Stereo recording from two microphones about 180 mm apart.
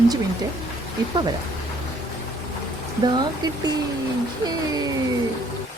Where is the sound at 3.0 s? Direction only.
25° right (ahead or behind).